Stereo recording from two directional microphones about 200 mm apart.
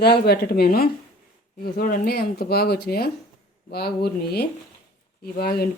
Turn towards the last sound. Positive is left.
turn(degrees=50)  # may be behind; listen again after turning